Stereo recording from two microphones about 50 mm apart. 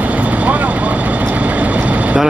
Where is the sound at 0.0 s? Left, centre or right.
Right.